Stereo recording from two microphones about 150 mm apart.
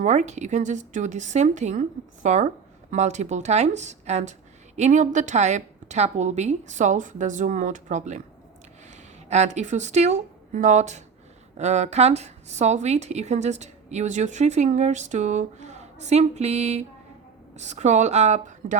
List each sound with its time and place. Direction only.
0.0 s a woman's voice: 50° right (ahead or behind)